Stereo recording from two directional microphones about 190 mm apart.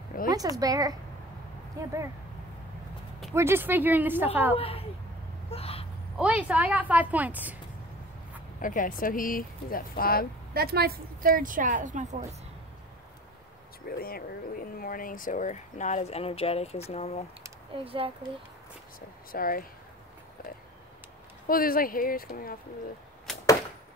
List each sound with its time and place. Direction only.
0.3 s a woman's voice: 20° right (ahead or behind)
3.3 s a woman's voice: 10° right (ahead or behind)
4.6 s a woman's voice: 30° left (ahead or behind)
5.5 s a sound: 30° left (ahead or behind)
6.1 s a woman's voice: 5° right (ahead or behind)
8.5 s speech: 45° left (ahead or behind)
10.5 s a woman's voice: 55° right (ahead or behind)
13.8 s speech: 50° left (ahead or behind); by 17.2 s 35° left (ahead or behind)
17.7 s a woman's voice: 30° right (ahead or behind)
18.9 s speech: 50° left (ahead or behind)
21.5 s speech: 50° left (ahead or behind)